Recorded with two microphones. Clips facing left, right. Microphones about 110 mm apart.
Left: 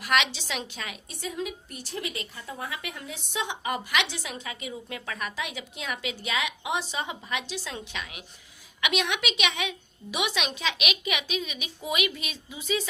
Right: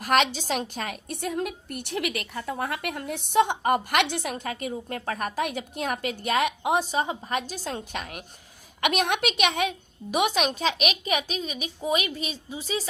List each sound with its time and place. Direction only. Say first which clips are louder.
0.0 s a woman's voice: right 4 dB; 45° right (ahead or behind)